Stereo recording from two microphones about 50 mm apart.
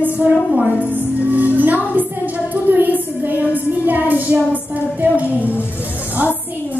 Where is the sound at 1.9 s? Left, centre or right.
Right.